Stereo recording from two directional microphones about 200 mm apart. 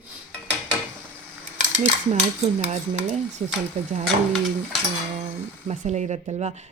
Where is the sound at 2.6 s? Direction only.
35° right (ahead or behind).